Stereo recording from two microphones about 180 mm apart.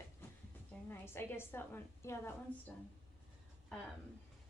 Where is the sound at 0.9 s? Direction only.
15° left (ahead or behind).